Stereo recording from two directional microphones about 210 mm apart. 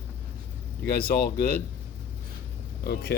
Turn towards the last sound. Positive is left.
turn(degrees=50)  # may be behind; listen again after turning